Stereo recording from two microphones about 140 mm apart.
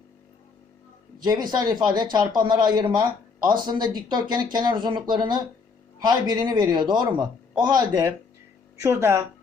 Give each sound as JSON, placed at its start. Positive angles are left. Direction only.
{"t": 1.2, "sound": "a man's voice", "side_deg": -30}